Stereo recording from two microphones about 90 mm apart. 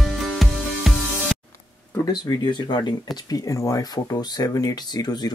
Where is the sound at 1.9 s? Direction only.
45° left (ahead or behind).